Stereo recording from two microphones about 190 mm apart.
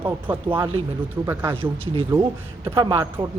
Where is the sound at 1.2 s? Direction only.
10° right (ahead or behind).